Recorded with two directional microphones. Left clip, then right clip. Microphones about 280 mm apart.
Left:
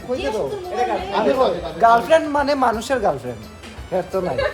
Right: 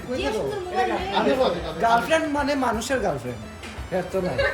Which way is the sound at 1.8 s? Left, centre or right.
Centre.